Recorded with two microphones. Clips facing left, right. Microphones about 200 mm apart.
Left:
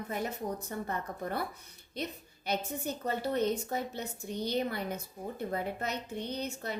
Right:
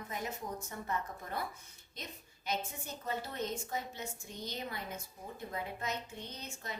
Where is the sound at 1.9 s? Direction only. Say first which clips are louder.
Left 10 dB; 65° left (ahead or behind).